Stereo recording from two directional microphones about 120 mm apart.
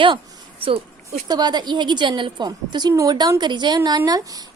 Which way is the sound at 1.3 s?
35° right (ahead or behind).